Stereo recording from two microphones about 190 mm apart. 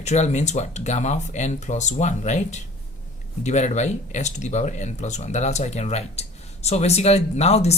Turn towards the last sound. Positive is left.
turn(degrees=35)  # may be behind; listen again after turning